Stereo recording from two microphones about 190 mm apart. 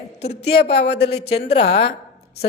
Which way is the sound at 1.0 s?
35° left (ahead or behind).